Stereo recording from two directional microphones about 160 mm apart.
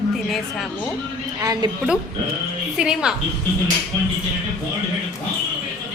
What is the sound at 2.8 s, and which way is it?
Speech, 5° right (ahead or behind).